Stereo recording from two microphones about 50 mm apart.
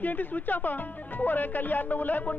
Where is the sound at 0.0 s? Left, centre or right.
Left.